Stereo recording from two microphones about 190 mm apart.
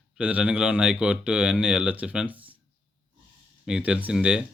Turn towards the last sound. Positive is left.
turn(degrees=-5)  # may be behind; listen again after turning